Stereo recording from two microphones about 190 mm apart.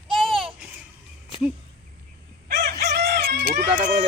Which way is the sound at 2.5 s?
60° right (ahead or behind).